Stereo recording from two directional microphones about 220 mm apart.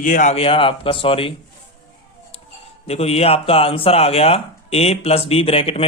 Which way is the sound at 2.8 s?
30° left (ahead or behind).